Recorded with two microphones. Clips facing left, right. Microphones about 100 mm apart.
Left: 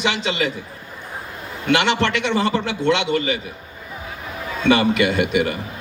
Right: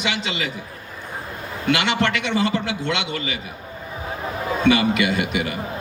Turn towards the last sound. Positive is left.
turn(degrees=35)  # may be behind; listen again after turning